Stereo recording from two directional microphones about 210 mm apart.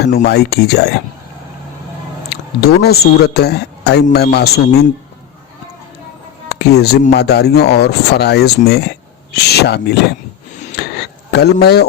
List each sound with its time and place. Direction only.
0.3 s speech: 50° left (ahead or behind)
2.3 s speech: 50° left (ahead or behind)
6.5 s a sound: 50° left (ahead or behind)
7.1 s speech: 50° left (ahead or behind)
10.8 s a sound: 50° left (ahead or behind)
11.3 s speech: 50° left (ahead or behind)